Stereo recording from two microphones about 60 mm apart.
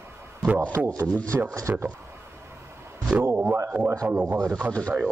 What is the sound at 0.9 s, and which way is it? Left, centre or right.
Speech, right.